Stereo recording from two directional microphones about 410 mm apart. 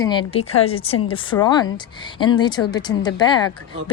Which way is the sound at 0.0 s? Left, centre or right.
Centre.